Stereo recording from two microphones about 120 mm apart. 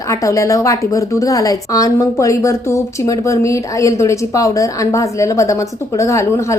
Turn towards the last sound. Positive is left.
turn(degrees=25)  # may be behind; listen again after turning